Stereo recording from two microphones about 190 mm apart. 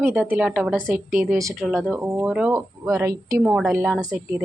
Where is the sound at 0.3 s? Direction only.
5° right (ahead or behind).